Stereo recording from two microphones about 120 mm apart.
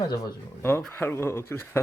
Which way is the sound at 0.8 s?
15° left (ahead or behind).